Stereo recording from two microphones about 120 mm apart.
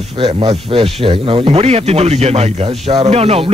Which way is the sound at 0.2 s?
55° right (ahead or behind).